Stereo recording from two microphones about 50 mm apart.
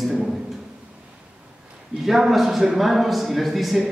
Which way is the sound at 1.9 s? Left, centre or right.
Centre.